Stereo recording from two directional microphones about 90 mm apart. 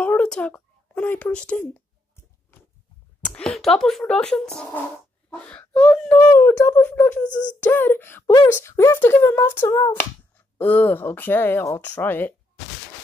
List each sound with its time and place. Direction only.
0.0 s a sound: 15° left (ahead or behind)
1.3 s speech: 15° left (ahead or behind)
3.2 s a sound: 15° left (ahead or behind)
3.4 s speech: 5° left (ahead or behind)
6.1 s speech: 30° left (ahead or behind)
9.9 s speech: 20° left (ahead or behind)